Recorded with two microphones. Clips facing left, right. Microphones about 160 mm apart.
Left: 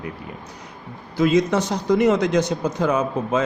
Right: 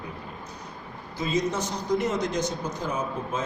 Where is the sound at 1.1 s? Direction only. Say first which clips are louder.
Left 9 dB; 80° left.